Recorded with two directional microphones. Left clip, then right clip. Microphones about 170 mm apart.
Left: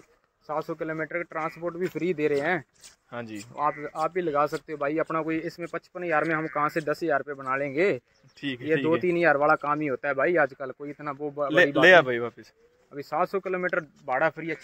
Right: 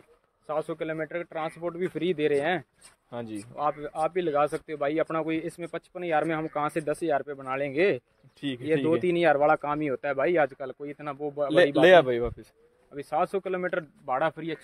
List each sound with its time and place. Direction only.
0.5 s speech: 35° left (ahead or behind)
0.7 s speech: 20° left (ahead or behind)
3.1 s speech: 15° right (ahead or behind)
3.5 s speech: 35° left (ahead or behind)
3.9 s speech: 15° left (ahead or behind)
5.2 s speech: 10° left (ahead or behind)
8.4 s speech: 15° right (ahead or behind)
8.7 s speech: 25° left (ahead or behind)
11.8 s speech: 10° right (ahead or behind)
13.1 s speech: 20° left (ahead or behind)